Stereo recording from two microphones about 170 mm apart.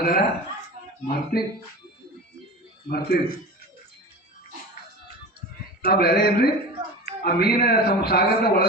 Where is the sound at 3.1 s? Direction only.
65° left (ahead or behind).